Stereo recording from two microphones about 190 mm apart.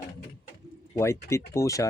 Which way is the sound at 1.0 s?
15° left (ahead or behind).